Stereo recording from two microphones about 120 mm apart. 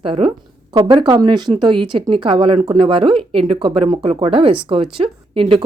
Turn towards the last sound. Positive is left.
turn(degrees=-50)  # may be behind; listen again after turning